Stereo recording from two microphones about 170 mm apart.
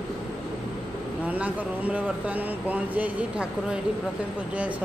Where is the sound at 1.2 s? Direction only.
10° right (ahead or behind).